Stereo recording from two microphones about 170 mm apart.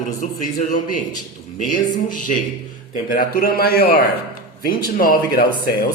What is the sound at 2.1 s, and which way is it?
Speech, 50° left (ahead or behind).